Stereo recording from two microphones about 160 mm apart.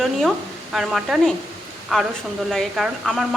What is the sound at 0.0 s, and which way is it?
Speech, centre (ahead or behind).